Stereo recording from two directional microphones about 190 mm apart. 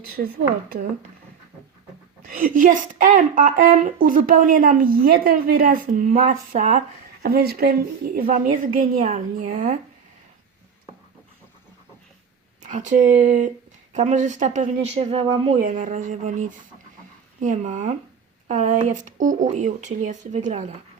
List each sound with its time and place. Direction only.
0.2 s a woman's voice: 50° right (ahead or behind)
2.2 s a woman's voice: 45° right (ahead or behind)
7.2 s a woman's voice: 55° right (ahead or behind)
12.6 s speech: 40° right (ahead or behind)
15.6 s speech: 40° right (ahead or behind)